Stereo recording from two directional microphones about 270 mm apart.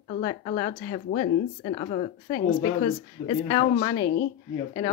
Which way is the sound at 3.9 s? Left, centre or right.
Left.